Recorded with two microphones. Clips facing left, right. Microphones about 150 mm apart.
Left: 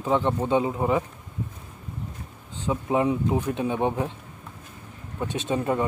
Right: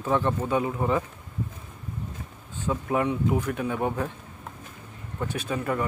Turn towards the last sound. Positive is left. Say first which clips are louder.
# left 3 dB
turn(degrees=25)  # may be behind; listen again after turning